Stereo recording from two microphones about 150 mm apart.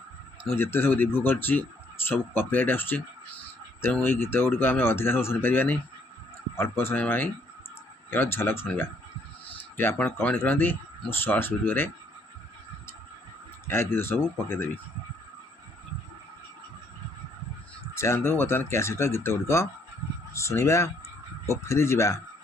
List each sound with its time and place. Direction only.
0.5 s speech: 15° left (ahead or behind)
13.7 s speech: 15° left (ahead or behind)
17.9 s speech: 20° left (ahead or behind)